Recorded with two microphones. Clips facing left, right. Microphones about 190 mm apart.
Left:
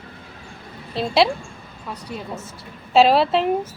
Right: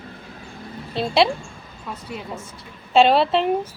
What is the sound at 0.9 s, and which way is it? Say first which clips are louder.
A woman's voice: even; centre (ahead or behind).